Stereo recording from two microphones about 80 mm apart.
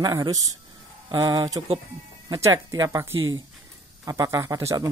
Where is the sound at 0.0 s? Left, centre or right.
Right.